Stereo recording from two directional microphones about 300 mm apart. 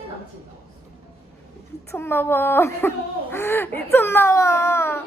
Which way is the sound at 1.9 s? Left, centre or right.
Centre.